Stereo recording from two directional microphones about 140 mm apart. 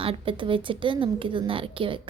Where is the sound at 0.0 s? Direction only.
40° right (ahead or behind).